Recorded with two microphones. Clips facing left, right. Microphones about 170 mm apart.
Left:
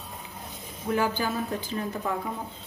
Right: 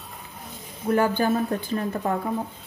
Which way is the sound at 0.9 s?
55° right (ahead or behind).